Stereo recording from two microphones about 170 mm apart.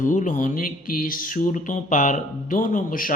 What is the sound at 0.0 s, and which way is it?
Speech, 45° left (ahead or behind).